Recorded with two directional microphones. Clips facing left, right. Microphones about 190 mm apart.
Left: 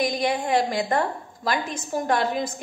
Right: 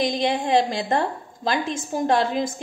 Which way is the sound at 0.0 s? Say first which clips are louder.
Right 1 dB; 25° right (ahead or behind).